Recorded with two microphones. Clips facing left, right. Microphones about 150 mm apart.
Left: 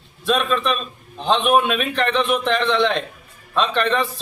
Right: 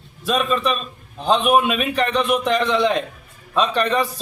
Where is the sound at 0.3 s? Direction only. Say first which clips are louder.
Even; 5° right (ahead or behind).